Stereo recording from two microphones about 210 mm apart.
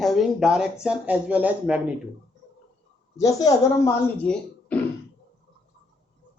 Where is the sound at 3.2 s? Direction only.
15° left (ahead or behind).